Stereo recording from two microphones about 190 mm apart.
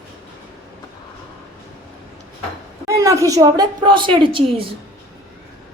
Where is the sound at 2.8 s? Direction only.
15° right (ahead or behind).